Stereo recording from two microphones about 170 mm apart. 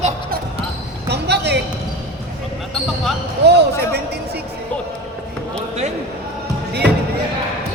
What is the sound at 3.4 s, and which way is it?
Speech, 80° right.